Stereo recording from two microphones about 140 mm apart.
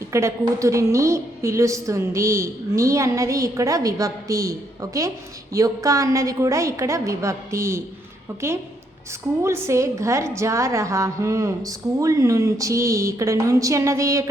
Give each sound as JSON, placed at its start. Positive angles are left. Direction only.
{"t": 0.1, "sound": "a woman's voice", "side_deg": -20}
{"t": 9.4, "sound": "a woman's voice", "side_deg": -20}